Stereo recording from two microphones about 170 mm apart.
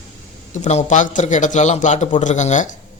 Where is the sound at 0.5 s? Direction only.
40° left (ahead or behind).